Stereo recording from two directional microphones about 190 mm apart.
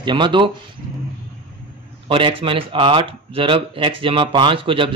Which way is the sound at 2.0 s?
25° right (ahead or behind).